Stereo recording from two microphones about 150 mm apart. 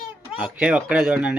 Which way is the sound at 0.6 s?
5° right (ahead or behind).